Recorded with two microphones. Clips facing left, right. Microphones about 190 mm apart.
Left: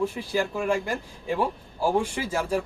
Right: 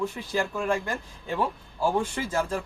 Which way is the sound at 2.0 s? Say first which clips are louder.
Even; 10° left (ahead or behind).